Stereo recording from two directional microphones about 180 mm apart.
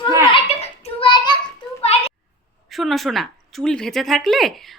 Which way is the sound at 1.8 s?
35° left (ahead or behind).